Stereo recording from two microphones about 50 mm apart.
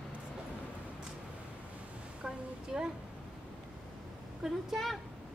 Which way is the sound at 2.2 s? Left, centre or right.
Centre.